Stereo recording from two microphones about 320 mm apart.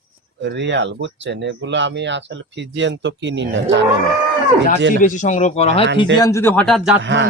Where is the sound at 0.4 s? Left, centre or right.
Right.